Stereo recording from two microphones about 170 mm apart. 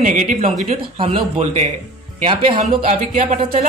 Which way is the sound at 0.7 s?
35° right (ahead or behind).